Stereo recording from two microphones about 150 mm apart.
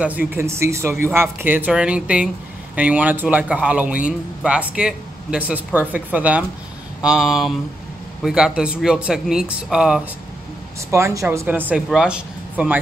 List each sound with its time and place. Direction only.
0.0 s speech: 10° right (ahead or behind)
10.9 s speech: 20° right (ahead or behind)